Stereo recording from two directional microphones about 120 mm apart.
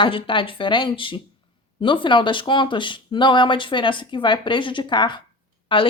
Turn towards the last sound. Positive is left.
turn(degrees=45)  # may be behind; listen again after turning